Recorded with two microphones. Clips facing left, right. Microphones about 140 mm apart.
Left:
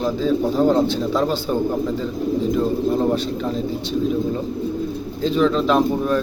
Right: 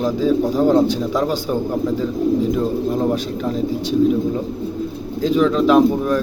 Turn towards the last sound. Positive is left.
turn(degrees=-5)  # may be behind; listen again after turning